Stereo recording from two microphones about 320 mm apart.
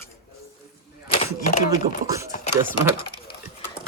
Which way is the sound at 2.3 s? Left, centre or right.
Left.